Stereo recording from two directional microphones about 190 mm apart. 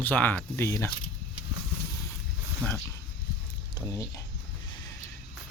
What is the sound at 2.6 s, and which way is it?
Speech, 5° left (ahead or behind).